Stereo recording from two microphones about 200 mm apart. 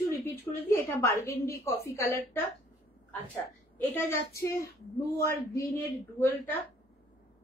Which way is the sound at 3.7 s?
10° left (ahead or behind).